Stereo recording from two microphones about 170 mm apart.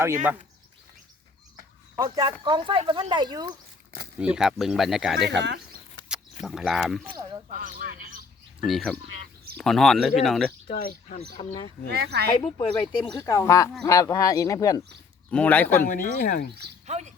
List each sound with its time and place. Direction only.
2.0 s speech: 25° right (ahead or behind)
4.2 s speech: 5° right (ahead or behind)
5.2 s speech: 90° right
6.4 s speech: centre (ahead or behind)
7.5 s a man's voice: 55° right (ahead or behind)
8.6 s speech: centre (ahead or behind)
10.8 s speech: 50° left (ahead or behind)
11.9 s a woman's voice: 70° right (ahead or behind)
12.5 s speech: 25° left (ahead or behind)
15.3 s speech: 5° left (ahead or behind)
15.8 s speech: 55° left (ahead or behind)
16.8 s speech: 40° right (ahead or behind)